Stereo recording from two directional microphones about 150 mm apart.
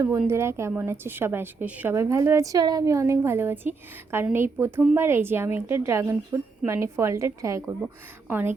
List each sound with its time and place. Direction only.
0.3 s a woman's voice: 15° right (ahead or behind)